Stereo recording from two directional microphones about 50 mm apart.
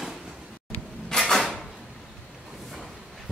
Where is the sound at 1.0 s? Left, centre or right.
Centre.